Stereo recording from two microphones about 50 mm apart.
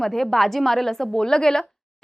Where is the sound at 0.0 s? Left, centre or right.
Centre.